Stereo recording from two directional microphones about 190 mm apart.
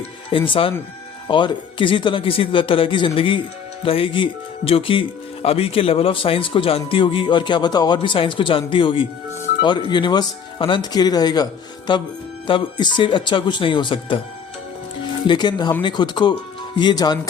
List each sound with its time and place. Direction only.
0.3 s speech: 25° left (ahead or behind)
15.3 s speech: 25° left (ahead or behind)